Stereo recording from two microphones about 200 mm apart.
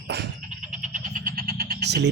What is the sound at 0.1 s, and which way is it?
Frog, 55° right (ahead or behind).